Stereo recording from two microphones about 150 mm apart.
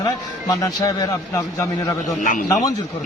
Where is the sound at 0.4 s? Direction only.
25° left (ahead or behind).